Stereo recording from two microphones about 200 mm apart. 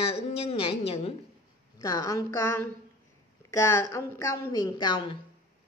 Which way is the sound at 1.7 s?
15° left (ahead or behind).